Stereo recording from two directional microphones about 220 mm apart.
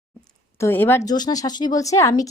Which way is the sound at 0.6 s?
10° left (ahead or behind).